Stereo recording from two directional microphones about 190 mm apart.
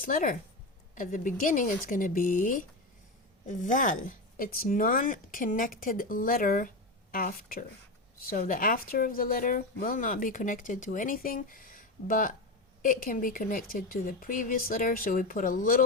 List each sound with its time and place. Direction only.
0.0 s speech: 45° left (ahead or behind)